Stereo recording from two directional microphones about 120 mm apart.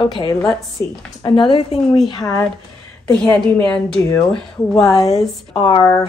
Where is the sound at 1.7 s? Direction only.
60° left (ahead or behind).